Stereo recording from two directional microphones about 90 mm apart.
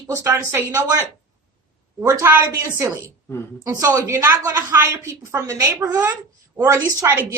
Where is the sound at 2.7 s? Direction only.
35° right (ahead or behind).